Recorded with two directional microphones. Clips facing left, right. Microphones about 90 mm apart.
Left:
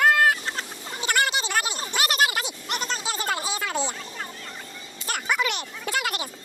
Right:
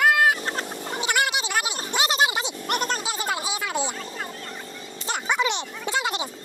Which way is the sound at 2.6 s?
50° right (ahead or behind).